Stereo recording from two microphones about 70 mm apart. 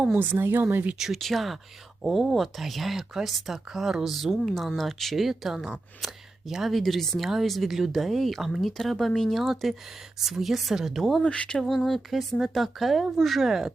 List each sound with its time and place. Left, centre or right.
0.1 s speech: right
0.9 s speech: centre
11.2 s speech: centre
11.6 s speech: centre